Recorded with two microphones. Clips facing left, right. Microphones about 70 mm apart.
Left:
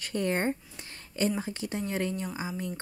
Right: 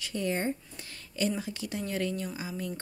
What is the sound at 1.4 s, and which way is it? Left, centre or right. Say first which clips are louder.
Speech: left 2 dB; left.